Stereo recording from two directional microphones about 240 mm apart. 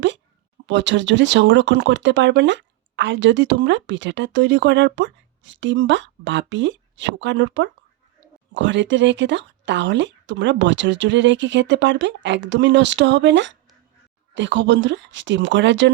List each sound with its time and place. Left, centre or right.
0.7 s speech: right